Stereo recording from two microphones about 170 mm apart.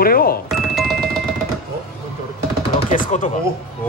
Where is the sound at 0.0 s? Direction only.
60° left (ahead or behind).